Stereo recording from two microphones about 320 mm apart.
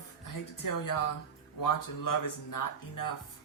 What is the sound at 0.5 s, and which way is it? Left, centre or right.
Speech, left.